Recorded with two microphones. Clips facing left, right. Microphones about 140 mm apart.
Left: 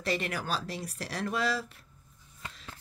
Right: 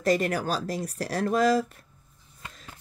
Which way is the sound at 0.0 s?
40° right (ahead or behind).